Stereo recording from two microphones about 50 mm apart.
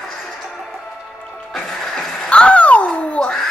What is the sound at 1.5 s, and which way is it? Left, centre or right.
Music, centre.